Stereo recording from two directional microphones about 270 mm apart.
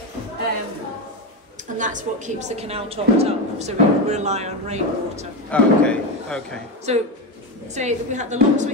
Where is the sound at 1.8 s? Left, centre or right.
Right.